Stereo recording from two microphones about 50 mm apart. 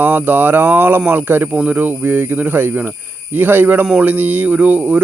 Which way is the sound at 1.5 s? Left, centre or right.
Right.